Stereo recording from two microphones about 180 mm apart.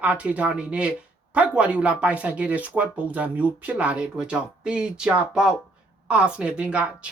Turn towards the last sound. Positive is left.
turn(degrees=-5)  # may be behind; listen again after turning